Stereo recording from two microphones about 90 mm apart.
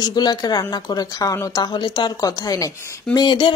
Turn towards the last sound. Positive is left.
turn(degrees=60)  # may be behind; listen again after turning